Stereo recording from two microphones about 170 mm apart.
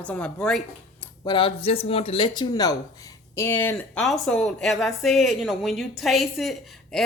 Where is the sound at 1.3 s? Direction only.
30° left (ahead or behind).